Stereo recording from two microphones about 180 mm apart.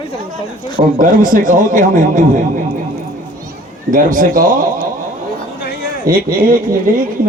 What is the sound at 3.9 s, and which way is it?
Speech, 50° right (ahead or behind).